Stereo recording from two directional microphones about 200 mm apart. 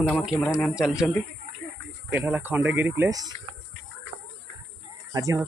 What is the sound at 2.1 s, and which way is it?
Speech, 10° right (ahead or behind).